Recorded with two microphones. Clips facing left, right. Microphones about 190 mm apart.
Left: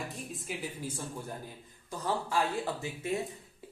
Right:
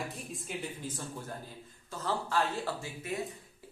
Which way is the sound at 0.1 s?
Centre (ahead or behind).